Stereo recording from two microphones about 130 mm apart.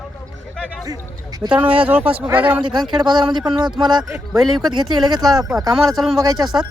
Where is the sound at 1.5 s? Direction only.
10° right (ahead or behind).